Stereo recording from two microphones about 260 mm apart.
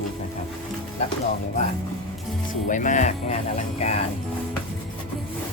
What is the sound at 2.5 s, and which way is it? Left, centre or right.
Speech, left.